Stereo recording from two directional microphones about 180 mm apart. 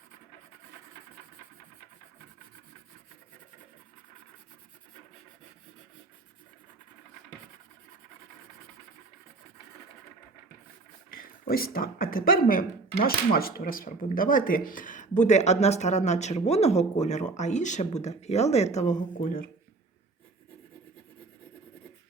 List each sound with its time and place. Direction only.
11.1 s speech: 55° left (ahead or behind)